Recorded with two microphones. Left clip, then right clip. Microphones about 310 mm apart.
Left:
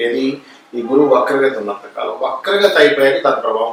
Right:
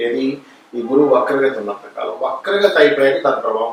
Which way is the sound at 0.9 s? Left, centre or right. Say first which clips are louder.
Left 1 dB; centre.